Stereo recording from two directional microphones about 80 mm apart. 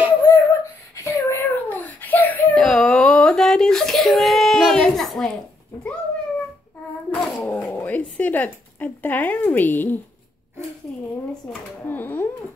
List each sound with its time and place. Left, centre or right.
0.1 s a sound: left
2.5 s whimper: centre
4.7 s a sound: centre
5.0 s a woman's voice: centre
7.2 s dog: centre
7.4 s speech: centre
11.8 s speech: left